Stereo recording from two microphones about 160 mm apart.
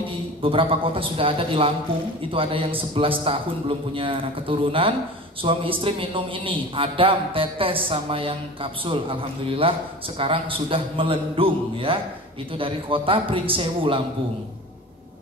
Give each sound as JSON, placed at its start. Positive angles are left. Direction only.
{"t": 0.4, "sound": "a man's voice", "side_deg": -35}